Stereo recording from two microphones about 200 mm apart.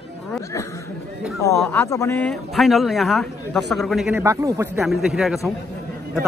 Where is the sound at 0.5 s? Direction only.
15° left (ahead or behind).